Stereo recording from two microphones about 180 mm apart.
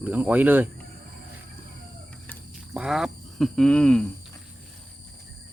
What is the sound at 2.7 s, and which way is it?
Speech, 5° right (ahead or behind).